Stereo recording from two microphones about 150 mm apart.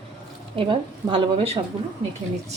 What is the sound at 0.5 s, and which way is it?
Speech, 35° right (ahead or behind).